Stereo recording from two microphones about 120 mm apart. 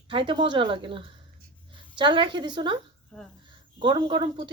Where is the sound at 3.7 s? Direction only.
40° right (ahead or behind).